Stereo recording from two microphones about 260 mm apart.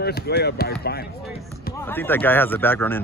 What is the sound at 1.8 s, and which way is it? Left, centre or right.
Speech, centre.